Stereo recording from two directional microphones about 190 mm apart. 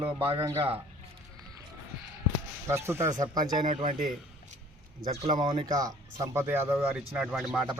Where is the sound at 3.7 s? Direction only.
40° right (ahead or behind).